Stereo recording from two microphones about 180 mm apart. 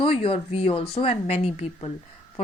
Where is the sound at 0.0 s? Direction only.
30° left (ahead or behind).